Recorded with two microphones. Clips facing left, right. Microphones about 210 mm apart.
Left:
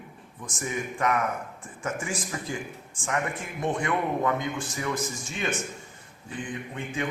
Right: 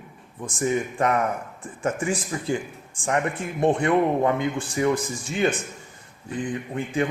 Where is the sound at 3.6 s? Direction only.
30° right (ahead or behind).